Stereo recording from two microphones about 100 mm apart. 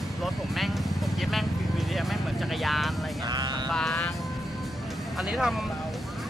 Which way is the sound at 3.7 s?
5° left (ahead or behind).